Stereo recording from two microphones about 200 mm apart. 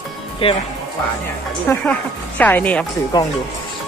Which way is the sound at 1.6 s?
5° left (ahead or behind).